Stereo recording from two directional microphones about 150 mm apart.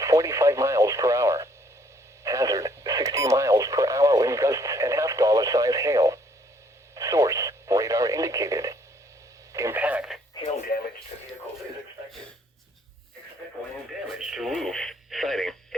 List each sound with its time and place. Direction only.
0.0 s radio: 20° right (ahead or behind)
10.4 s radio: 30° left (ahead or behind)
14.2 s radio: centre (ahead or behind)